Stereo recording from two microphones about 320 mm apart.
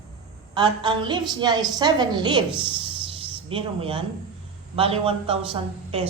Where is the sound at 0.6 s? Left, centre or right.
Centre.